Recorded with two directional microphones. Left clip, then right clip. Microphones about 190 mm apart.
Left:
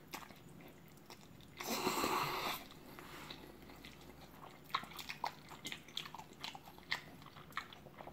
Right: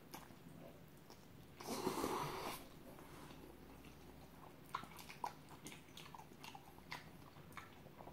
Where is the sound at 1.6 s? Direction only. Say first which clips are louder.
Left 5 dB; 25° left (ahead or behind).